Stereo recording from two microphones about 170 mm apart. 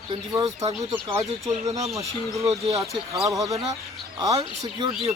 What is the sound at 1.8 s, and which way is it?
Speech, 20° right (ahead or behind).